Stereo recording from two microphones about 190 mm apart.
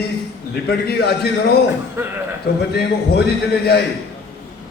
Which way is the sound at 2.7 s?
60° left (ahead or behind).